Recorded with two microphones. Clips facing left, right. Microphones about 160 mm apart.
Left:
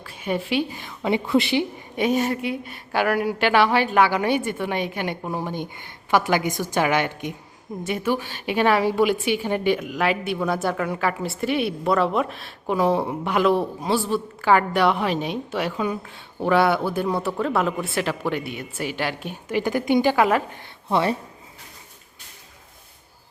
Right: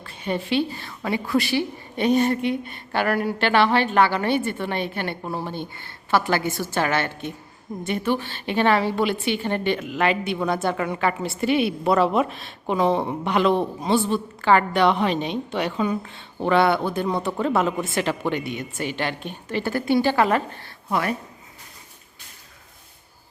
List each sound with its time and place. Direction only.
0.0 s a woman's voice: 10° left (ahead or behind)
20.9 s speech: 30° left (ahead or behind)